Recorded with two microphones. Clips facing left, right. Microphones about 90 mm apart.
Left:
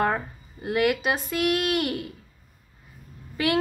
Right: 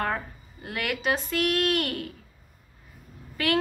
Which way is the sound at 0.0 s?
20° left (ahead or behind).